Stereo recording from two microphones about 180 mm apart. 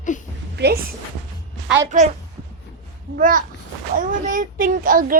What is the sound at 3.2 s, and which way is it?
A child's voice, 50° right (ahead or behind).